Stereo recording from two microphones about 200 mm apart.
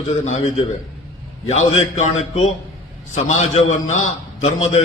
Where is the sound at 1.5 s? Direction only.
35° left (ahead or behind).